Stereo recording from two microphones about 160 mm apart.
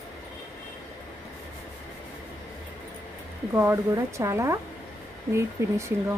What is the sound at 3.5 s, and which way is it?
Speech, 15° right (ahead or behind).